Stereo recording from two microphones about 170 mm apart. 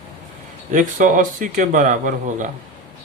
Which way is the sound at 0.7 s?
50° right (ahead or behind).